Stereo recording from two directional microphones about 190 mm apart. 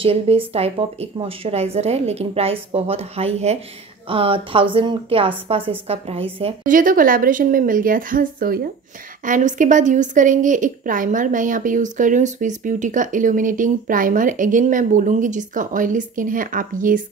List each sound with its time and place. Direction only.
0.0 s speech: 30° right (ahead or behind)
6.6 s a woman's voice: 45° right (ahead or behind)